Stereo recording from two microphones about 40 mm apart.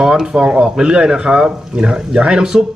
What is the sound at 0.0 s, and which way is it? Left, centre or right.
A man's voice, centre.